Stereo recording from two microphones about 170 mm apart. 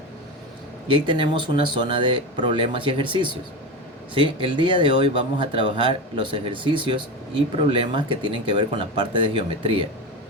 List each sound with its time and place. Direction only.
0.9 s speech: 30° right (ahead or behind)